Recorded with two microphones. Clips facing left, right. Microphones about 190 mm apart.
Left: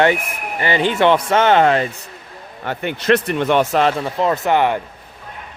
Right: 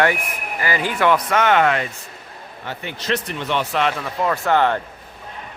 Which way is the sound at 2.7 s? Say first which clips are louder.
Left 8 dB; 60° left (ahead or behind).